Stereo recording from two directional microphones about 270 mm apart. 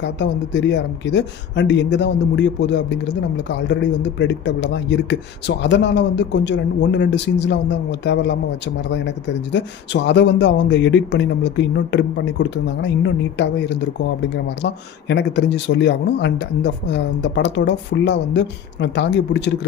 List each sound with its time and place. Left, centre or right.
0.0 s speech: left